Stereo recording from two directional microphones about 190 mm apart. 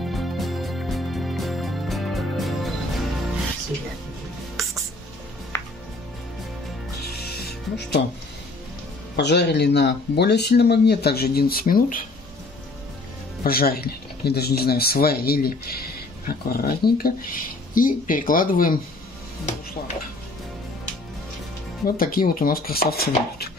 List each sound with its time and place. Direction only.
0.0 s music: centre (ahead or behind)
4.6 s music: centre (ahead or behind)
5.5 s music: 15° left (ahead or behind)
7.3 s music: 60° left (ahead or behind)
9.1 s speech: 65° left (ahead or behind); by 12.0 s 50° left (ahead or behind)
13.4 s speech: 50° left (ahead or behind)
21.8 s speech: 50° left (ahead or behind)